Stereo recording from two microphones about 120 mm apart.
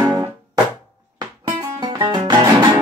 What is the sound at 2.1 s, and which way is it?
Music, 40° right (ahead or behind).